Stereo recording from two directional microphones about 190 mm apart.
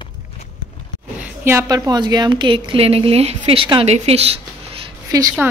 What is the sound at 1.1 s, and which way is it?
A woman's voice, 15° right (ahead or behind).